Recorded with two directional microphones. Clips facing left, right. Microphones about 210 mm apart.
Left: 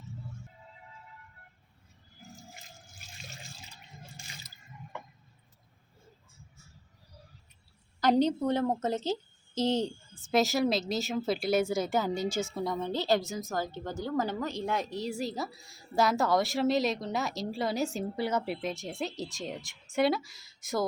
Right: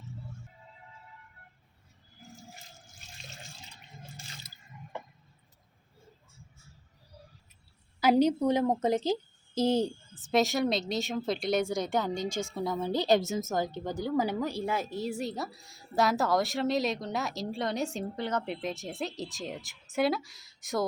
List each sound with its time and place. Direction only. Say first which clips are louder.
8.0 s a woman's voice: right 2 dB; 10° right (ahead or behind)
10.3 s a woman's voice: even; centre (ahead or behind)
12.9 s a woman's voice: right 5 dB; 15° right (ahead or behind); by 20.8 s centre (ahead or behind)